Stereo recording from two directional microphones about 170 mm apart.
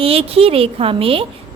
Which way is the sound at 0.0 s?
35° right (ahead or behind).